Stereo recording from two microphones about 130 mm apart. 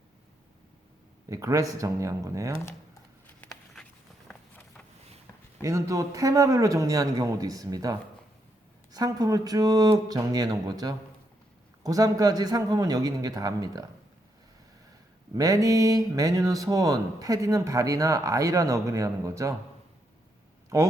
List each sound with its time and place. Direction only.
1.3 s speech: 25° right (ahead or behind)
5.6 s speech: 25° right (ahead or behind)
15.4 s speech: 25° right (ahead or behind)
20.7 s speech: 25° right (ahead or behind)